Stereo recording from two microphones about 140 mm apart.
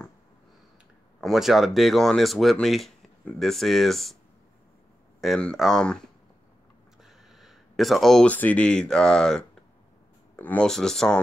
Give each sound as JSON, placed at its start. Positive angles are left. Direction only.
{"t": 1.2, "sound": "speech", "side_deg": 0}
{"t": 5.2, "sound": "speech", "side_deg": 5}
{"t": 7.0, "sound": "speech", "side_deg": 0}